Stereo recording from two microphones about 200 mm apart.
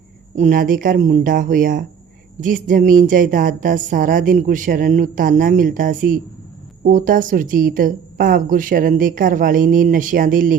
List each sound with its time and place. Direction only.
0.3 s speech: 40° right (ahead or behind)